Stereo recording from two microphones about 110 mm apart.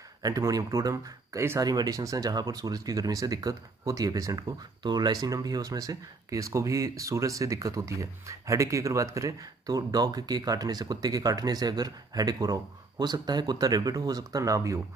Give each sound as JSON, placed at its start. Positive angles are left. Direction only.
{"t": 0.2, "sound": "speech", "side_deg": -35}